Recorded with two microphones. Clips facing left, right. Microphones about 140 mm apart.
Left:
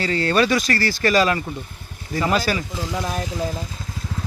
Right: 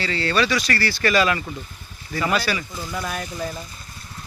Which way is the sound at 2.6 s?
90° left.